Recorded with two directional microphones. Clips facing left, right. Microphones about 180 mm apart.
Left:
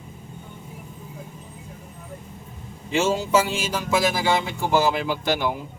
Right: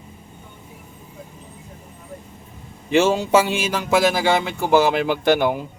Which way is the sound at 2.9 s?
65° right (ahead or behind).